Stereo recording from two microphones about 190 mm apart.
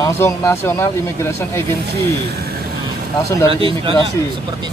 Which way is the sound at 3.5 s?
25° right (ahead or behind).